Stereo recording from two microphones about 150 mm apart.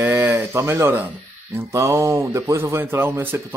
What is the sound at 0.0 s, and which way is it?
Speech, 15° right (ahead or behind).